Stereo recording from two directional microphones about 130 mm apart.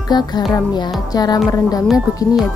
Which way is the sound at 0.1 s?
35° left (ahead or behind).